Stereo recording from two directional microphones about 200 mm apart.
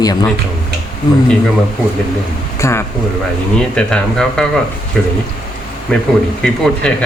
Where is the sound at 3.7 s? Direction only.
5° left (ahead or behind).